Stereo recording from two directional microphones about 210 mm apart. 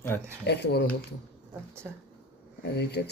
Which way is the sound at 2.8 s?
50° left (ahead or behind).